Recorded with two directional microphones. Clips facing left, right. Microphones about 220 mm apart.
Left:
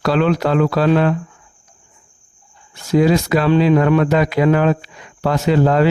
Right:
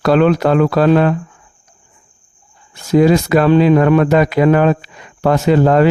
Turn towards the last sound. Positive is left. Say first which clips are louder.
# right 3 dB
turn(degrees=-50)  # may be behind; listen again after turning